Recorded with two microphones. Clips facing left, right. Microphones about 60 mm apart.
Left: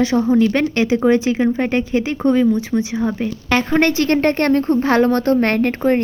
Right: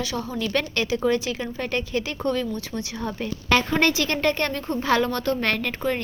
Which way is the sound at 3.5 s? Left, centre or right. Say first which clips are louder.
Left 4 dB; left.